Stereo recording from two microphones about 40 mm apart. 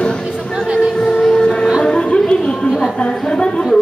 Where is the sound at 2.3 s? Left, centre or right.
Left.